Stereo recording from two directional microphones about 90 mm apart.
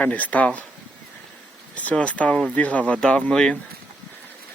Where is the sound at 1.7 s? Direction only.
15° left (ahead or behind).